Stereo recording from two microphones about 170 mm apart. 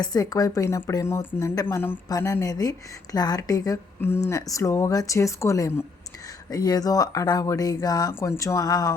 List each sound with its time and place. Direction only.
0.0 s speech: 20° left (ahead or behind)